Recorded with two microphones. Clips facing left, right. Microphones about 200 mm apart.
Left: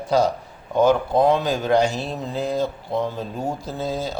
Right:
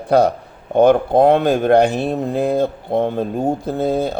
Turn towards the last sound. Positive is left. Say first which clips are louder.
# right 8 dB
turn(degrees=-60)  # may be behind; listen again after turning